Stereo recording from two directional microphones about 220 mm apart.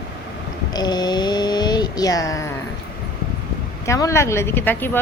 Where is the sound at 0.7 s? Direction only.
20° left (ahead or behind).